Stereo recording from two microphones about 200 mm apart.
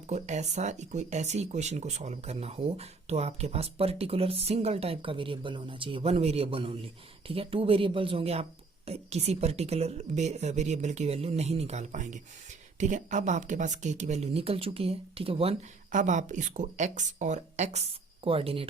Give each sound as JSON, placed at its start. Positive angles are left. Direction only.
{"t": 0.1, "sound": "speech", "side_deg": -35}